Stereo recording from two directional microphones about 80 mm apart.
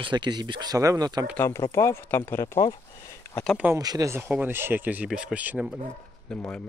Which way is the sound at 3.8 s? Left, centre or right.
Right.